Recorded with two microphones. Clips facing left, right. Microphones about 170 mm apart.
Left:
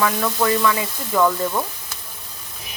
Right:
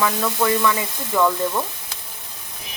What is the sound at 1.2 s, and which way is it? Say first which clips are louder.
Speech: even; 5° left (ahead or behind).